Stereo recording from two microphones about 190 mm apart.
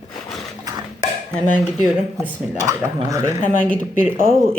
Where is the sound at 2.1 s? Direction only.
10° left (ahead or behind).